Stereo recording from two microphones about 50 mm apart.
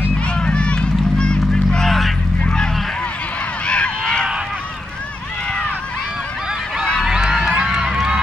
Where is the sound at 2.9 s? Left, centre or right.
Left.